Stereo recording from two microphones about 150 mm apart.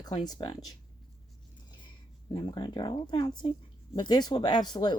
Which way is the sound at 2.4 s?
30° left (ahead or behind).